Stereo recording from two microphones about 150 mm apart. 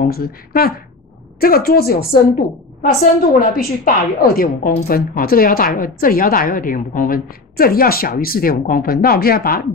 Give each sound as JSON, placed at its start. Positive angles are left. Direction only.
{"t": 0.1, "sound": "a woman's voice", "side_deg": 85}
{"t": 2.8, "sound": "a woman's voice", "side_deg": 65}